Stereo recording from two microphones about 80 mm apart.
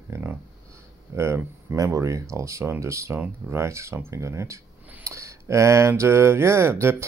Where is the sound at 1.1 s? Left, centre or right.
Right.